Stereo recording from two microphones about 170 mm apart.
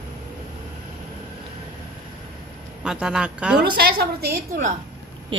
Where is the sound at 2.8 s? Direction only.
5° right (ahead or behind).